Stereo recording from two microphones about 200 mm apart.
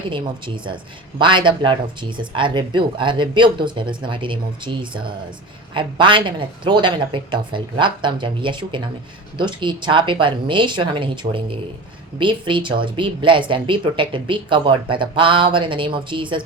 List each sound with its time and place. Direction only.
0.1 s speech: 25° right (ahead or behind)